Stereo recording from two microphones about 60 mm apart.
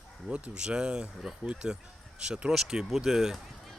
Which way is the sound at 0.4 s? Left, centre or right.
Centre.